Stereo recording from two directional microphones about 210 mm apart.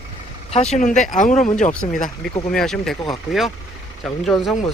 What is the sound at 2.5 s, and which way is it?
Speech, 5° left (ahead or behind).